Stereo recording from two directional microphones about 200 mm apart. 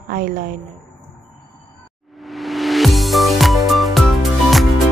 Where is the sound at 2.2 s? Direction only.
Centre (ahead or behind).